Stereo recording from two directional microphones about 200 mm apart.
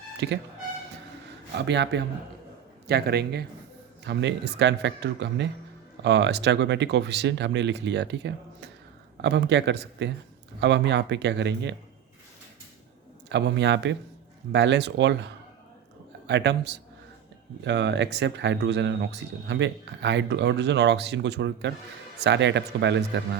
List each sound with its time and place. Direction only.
0.2 s speech: 60° right (ahead or behind)
1.5 s a man's voice: 60° right (ahead or behind)
13.2 s speech: 60° right (ahead or behind)